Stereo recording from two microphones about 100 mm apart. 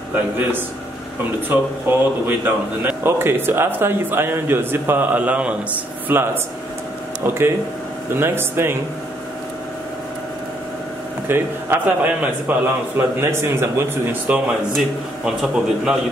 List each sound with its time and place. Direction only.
1.5 s speech: 20° right (ahead or behind)
11.2 s speech: 20° right (ahead or behind)
15.2 s a man's voice: 5° right (ahead or behind)